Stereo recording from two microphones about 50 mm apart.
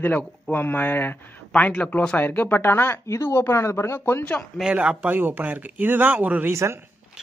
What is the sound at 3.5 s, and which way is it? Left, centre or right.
Speech, left.